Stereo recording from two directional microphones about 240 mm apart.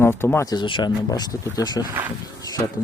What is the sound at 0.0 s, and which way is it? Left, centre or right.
Speech, centre.